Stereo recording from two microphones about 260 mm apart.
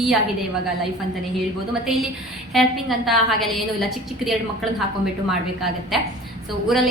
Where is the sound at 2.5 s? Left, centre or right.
Centre.